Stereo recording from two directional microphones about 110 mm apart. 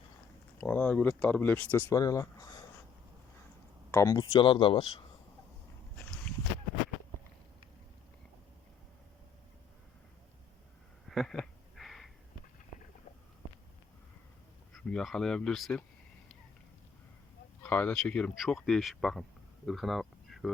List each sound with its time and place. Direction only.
0.6 s speech: 15° left (ahead or behind)
1.9 s speech: 30° left (ahead or behind)
3.9 s speech: 30° left (ahead or behind)
4.2 s speech: 45° left (ahead or behind)
11.1 s a sound: centre (ahead or behind)
14.7 s speech: 5° left (ahead or behind)
17.6 s speech: 15° left (ahead or behind); by 20.5 s centre (ahead or behind)